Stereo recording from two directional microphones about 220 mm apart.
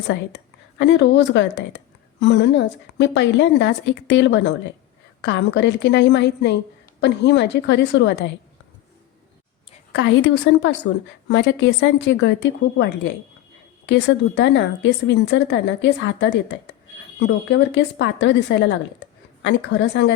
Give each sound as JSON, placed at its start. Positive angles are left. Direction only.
{"t": 0.1, "sound": "a woman's voice", "side_deg": 55}
{"t": 9.9, "sound": "a woman's voice", "side_deg": 55}